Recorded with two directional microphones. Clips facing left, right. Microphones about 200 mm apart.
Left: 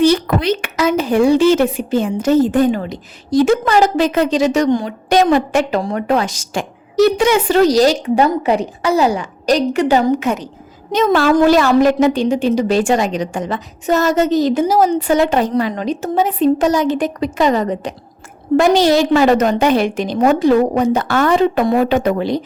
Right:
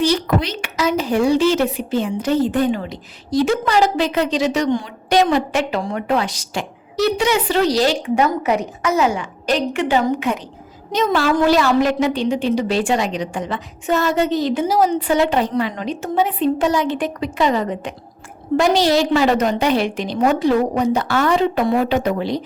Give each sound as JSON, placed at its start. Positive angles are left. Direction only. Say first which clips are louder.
{"t": 0.0, "sound": "a woman's voice", "louder": "left 5 dB", "side_deg": 55}